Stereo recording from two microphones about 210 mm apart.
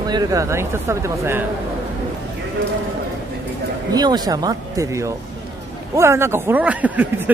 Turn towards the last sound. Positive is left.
turn(degrees=-5)  # may be behind; listen again after turning